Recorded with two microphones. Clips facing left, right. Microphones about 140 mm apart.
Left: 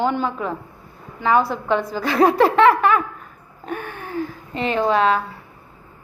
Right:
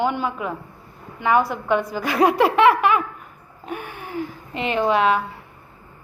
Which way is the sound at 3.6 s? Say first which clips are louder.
Left 2 dB; 10° right (ahead or behind).